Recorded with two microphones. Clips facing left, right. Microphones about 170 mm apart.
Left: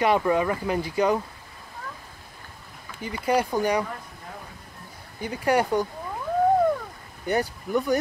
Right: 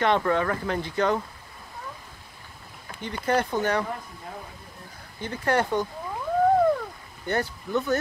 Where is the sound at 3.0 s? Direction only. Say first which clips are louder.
Left 1 dB; 10° left (ahead or behind).